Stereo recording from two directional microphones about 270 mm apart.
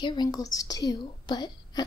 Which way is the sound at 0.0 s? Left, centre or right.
Centre.